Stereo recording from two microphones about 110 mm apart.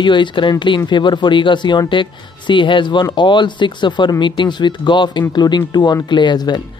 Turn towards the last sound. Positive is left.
turn(degrees=40)  # may be behind; listen again after turning